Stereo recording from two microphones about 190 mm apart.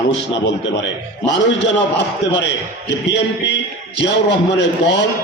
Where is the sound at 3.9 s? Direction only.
70° left (ahead or behind).